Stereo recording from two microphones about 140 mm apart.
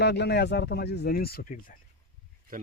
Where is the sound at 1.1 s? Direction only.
90° left.